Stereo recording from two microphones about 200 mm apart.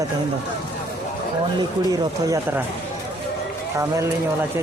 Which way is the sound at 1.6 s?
20° right (ahead or behind).